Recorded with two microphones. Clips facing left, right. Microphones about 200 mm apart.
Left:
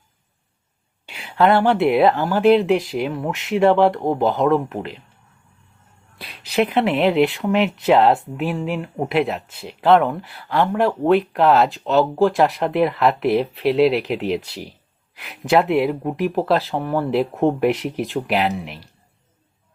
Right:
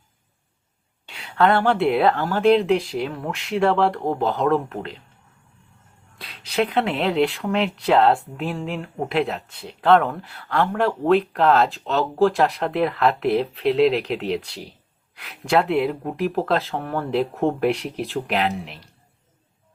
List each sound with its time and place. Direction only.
1.0 s speech: 10° left (ahead or behind)
6.2 s a woman's voice: 10° left (ahead or behind)